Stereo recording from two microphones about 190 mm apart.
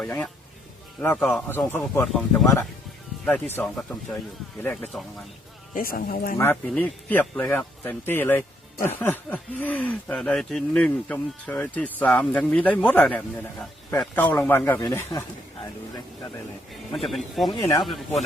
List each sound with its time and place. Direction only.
0.0 s speech: 10° left (ahead or behind)
3.2 s speech: 10° left (ahead or behind)
5.7 s speech: 45° left (ahead or behind)
6.3 s speech: 10° left (ahead or behind)
14.8 s speech: 20° left (ahead or behind)
16.9 s speech: centre (ahead or behind)
17.5 s speech: 20° left (ahead or behind)